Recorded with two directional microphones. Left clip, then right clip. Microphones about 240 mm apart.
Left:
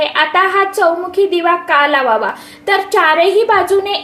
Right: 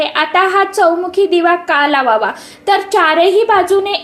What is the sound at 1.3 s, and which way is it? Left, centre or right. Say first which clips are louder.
A woman's voice: right 1 dB; right.